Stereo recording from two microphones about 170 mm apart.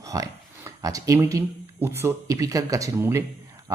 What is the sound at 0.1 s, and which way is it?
A man's voice, 20° right (ahead or behind).